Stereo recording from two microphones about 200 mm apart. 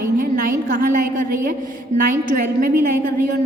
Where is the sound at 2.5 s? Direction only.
45° right (ahead or behind).